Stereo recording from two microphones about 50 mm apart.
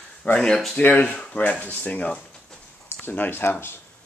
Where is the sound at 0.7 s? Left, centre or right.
Left.